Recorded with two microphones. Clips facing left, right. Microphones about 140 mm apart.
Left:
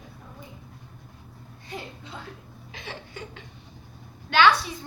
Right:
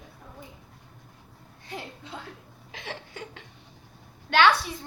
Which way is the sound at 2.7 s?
80° right.